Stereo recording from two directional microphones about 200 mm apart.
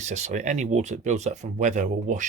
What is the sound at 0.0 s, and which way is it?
Speech, 35° right (ahead or behind).